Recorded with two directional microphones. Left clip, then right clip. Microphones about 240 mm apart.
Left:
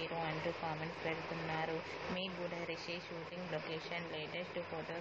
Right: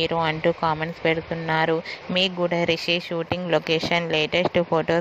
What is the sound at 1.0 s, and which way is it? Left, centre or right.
Speech, right.